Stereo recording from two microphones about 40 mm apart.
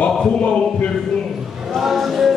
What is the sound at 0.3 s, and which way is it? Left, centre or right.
Speech, left.